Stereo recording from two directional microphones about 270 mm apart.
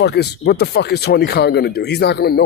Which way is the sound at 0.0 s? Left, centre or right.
Left.